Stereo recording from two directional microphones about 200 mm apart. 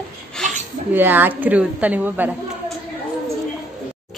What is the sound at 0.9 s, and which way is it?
A woman's voice, 10° right (ahead or behind).